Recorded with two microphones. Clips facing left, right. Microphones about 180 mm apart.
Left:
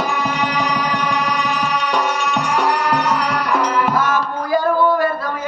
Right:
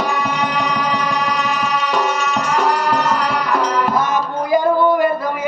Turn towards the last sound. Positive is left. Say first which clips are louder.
# right 2 dB
turn(degrees=-15)  # may be behind; listen again after turning